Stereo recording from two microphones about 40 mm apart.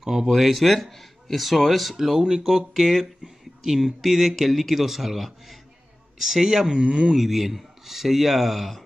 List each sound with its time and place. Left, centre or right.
0.0 s speech: centre
7.2 s speech: centre